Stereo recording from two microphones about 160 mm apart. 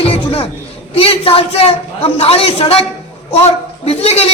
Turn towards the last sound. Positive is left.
turn(degrees=40)  # may be behind; listen again after turning